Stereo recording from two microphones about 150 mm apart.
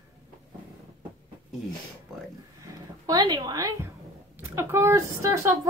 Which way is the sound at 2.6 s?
25° right (ahead or behind).